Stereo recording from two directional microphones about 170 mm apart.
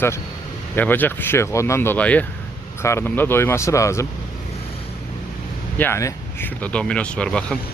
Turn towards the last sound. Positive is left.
turn(degrees=5)  # may be behind; listen again after turning